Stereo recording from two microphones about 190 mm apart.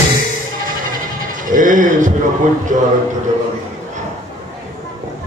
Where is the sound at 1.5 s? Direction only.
45° right (ahead or behind).